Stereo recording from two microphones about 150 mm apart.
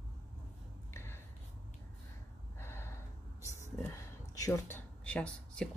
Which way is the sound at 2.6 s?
15° left (ahead or behind).